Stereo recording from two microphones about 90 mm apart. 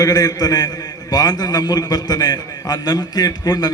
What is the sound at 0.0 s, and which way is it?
A man's voice, 45° left (ahead or behind).